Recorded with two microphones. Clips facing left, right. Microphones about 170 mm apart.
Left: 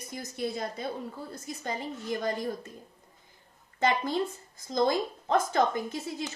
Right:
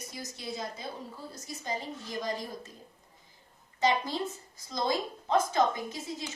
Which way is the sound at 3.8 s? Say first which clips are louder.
Left 1 dB; 55° left (ahead or behind).